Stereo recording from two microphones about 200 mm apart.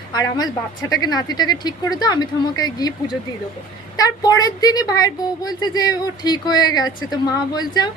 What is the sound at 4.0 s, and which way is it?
A woman's voice, 20° left (ahead or behind).